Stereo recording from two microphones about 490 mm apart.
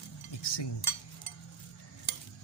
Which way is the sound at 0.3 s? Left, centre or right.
Left.